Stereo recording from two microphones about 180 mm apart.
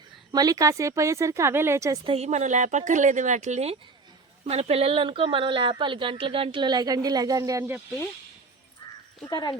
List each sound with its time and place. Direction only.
0.3 s speech: 20° right (ahead or behind)
2.0 s speech: 35° right (ahead or behind); by 7.8 s 20° right (ahead or behind)
9.2 s speech: 25° left (ahead or behind)